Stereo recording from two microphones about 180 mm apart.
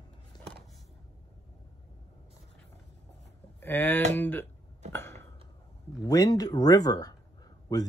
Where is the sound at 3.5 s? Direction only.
10° left (ahead or behind).